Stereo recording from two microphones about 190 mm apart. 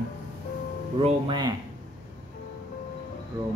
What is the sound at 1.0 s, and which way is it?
Speech, 25° right (ahead or behind).